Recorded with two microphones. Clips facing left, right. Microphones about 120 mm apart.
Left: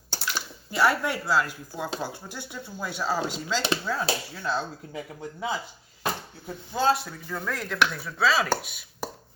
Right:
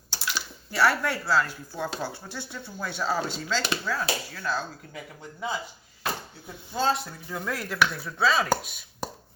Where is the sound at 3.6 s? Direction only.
25° left (ahead or behind).